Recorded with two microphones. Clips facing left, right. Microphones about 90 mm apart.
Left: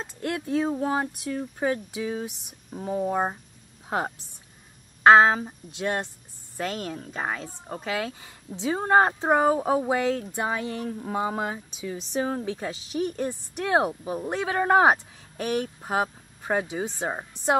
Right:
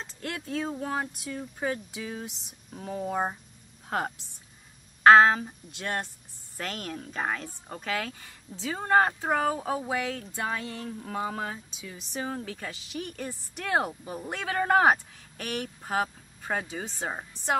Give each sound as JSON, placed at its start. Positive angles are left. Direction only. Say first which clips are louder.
{"t": 0.0, "sound": "speech", "louder": "left 6 dB", "side_deg": 20}